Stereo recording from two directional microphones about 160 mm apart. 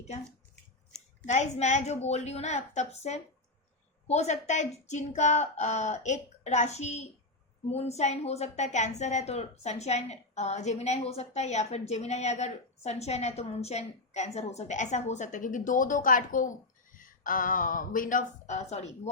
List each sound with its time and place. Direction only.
1.2 s a woman's voice: 45° left (ahead or behind)